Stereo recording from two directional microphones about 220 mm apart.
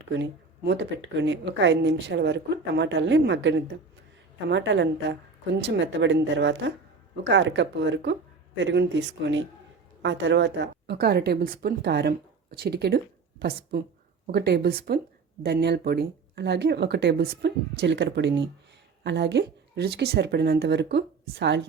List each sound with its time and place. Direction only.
0.1 s a woman's voice: 50° right (ahead or behind)